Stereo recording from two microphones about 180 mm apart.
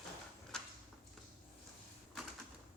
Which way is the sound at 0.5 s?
5° left (ahead or behind).